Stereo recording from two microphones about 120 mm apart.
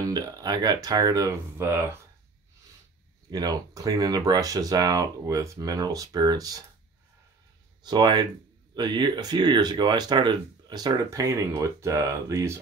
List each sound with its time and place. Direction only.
0.0 s speech: 35° right (ahead or behind)
3.3 s speech: 30° right (ahead or behind)
7.8 s speech: 35° right (ahead or behind)